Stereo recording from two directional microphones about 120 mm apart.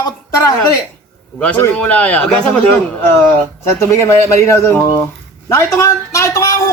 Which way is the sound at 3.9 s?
25° left (ahead or behind).